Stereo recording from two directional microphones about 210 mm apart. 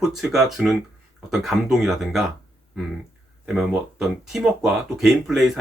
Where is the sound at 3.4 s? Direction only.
Centre (ahead or behind).